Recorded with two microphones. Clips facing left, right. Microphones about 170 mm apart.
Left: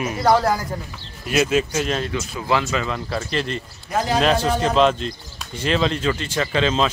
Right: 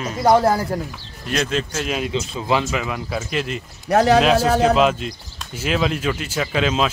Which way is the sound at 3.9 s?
70° right (ahead or behind).